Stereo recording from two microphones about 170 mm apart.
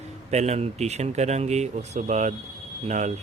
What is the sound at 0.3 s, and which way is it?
A man's voice, 40° right (ahead or behind).